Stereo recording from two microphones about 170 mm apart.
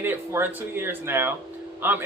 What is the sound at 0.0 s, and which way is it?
Speech, 10° right (ahead or behind).